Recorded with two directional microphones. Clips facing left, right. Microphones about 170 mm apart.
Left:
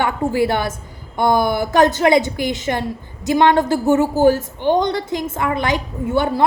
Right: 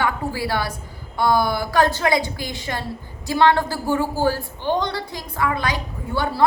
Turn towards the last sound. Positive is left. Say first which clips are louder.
# left 6 dB
turn(degrees=20)  # may be behind; listen again after turning